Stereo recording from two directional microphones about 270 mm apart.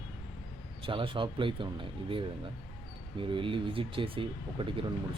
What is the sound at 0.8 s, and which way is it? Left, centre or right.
Speech, centre.